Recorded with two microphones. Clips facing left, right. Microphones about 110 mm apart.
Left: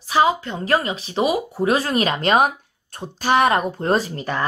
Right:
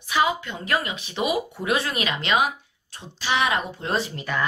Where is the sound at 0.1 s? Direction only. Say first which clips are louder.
Left 5 dB; 35° left (ahead or behind).